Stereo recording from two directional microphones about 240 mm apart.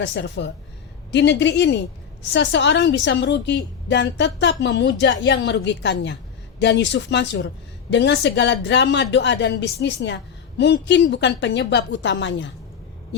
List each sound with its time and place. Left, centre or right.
0.0 s a woman's voice: left